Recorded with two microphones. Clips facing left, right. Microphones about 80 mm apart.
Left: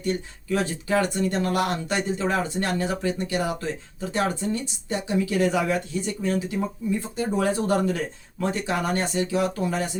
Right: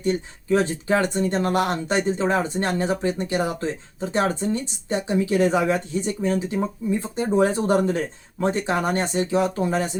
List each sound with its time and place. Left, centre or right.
0.5 s speech: right